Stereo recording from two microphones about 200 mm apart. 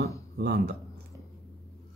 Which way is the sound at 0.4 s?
55° right (ahead or behind).